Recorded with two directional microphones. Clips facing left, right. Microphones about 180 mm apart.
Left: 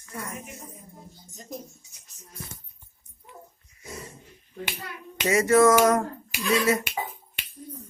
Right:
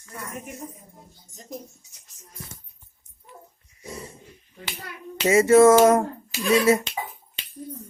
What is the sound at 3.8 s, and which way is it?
Dog, 30° right (ahead or behind).